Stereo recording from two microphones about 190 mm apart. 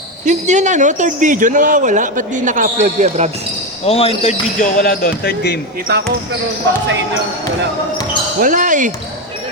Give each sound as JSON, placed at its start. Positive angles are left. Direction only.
{"t": 0.3, "sound": "speech", "side_deg": -40}
{"t": 3.8, "sound": "speech", "side_deg": 30}
{"t": 4.8, "sound": "speech", "side_deg": 55}
{"t": 5.9, "sound": "speech", "side_deg": -60}
{"t": 8.4, "sound": "speech", "side_deg": -45}